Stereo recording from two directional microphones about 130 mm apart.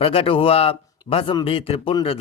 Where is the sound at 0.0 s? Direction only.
45° left (ahead or behind).